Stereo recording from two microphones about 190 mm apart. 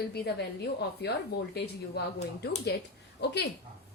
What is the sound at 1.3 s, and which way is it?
Speech, 60° left (ahead or behind).